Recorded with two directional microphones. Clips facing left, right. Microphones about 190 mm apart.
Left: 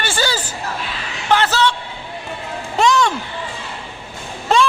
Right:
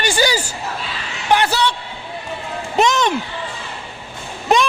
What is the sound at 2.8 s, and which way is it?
Speech, 20° right (ahead or behind).